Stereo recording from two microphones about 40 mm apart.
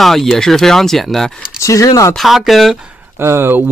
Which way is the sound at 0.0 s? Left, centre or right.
Centre.